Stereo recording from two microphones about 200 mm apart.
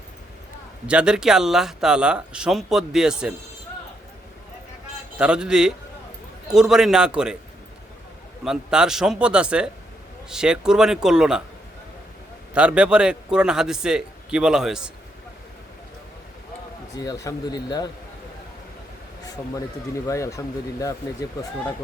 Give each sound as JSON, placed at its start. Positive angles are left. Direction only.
{"t": 0.9, "sound": "speech", "side_deg": -5}
{"t": 5.1, "sound": "speech", "side_deg": -5}
{"t": 8.4, "sound": "speech", "side_deg": -5}
{"t": 12.5, "sound": "speech", "side_deg": -5}
{"t": 17.0, "sound": "speech", "side_deg": 20}
{"t": 20.1, "sound": "speech", "side_deg": 15}